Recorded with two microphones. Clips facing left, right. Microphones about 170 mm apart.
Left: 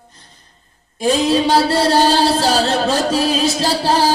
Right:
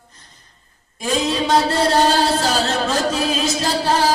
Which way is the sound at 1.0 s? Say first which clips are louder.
Left 5 dB; 30° left (ahead or behind).